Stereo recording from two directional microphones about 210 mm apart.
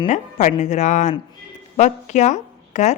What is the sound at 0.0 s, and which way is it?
A woman's voice, 35° left (ahead or behind).